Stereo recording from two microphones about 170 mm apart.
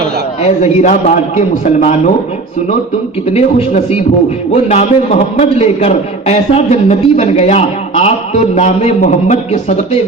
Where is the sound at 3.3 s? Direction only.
35° left (ahead or behind).